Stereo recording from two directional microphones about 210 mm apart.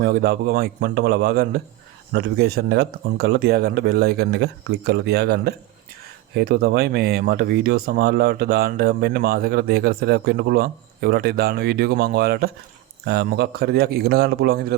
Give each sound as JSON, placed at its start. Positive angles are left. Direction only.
{"t": 0.0, "sound": "speech", "side_deg": -45}